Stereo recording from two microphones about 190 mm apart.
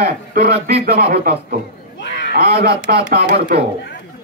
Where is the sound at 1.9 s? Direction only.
65° left (ahead or behind).